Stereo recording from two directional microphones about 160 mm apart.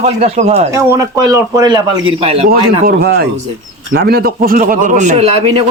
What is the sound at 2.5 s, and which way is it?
A man's voice, 70° right (ahead or behind).